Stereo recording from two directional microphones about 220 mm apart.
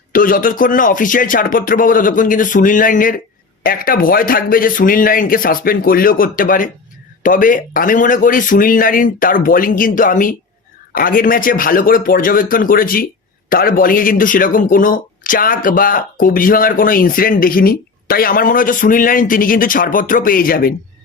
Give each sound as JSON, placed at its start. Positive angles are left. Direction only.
{"t": 0.1, "sound": "speech", "side_deg": 40}